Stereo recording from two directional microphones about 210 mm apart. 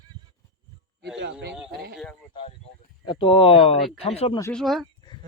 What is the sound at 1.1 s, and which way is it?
Speech, 55° right (ahead or behind).